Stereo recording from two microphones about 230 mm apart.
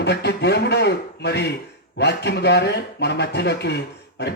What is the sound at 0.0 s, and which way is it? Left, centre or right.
Speech, left.